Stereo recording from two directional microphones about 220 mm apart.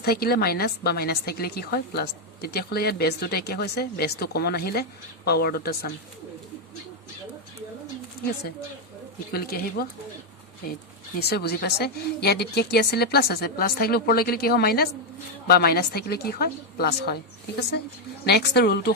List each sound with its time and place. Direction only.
0.0 s a woman's voice: 45° left (ahead or behind)
9.3 s a woman's voice: 45° left (ahead or behind)
11.2 s a woman's voice: 45° left (ahead or behind)